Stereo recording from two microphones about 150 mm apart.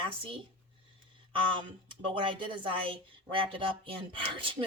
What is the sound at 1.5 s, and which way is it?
A woman's voice, 35° right (ahead or behind).